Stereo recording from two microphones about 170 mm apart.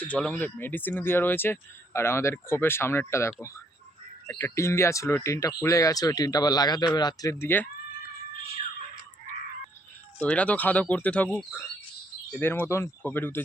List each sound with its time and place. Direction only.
0.1 s speech: 5° left (ahead or behind)
10.2 s speech: 10° left (ahead or behind)